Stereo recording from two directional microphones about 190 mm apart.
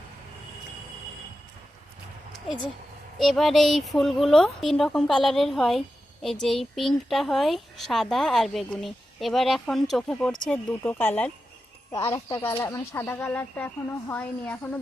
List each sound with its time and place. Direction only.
3.2 s speech: centre (ahead or behind)